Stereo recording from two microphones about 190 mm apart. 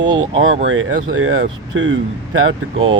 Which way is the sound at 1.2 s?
90° right.